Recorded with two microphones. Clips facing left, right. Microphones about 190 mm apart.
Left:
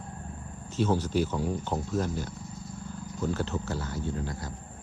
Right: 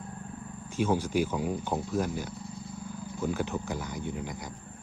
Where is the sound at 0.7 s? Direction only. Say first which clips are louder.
Left 1 dB; 10° right (ahead or behind).